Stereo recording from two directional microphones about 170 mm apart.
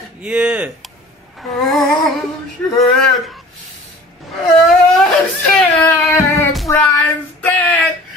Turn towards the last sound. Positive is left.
turn(degrees=10)  # may be behind; listen again after turning